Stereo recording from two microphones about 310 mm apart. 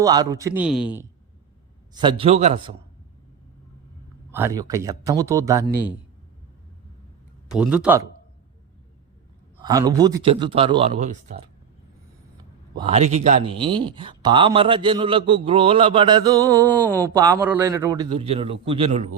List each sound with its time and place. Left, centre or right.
0.0 s speech: centre
1.9 s speech: centre
4.3 s speech: centre
7.4 s speech: centre
9.6 s speech: centre
12.7 s speech: centre
16.5 s a sound: centre
17.0 s speech: centre